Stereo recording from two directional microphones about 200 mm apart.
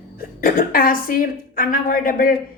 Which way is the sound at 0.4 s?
45° left (ahead or behind).